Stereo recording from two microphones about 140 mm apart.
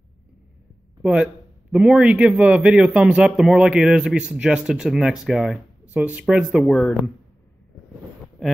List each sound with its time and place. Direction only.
1.0 s a man's voice: 5° right (ahead or behind)
8.4 s speech: centre (ahead or behind)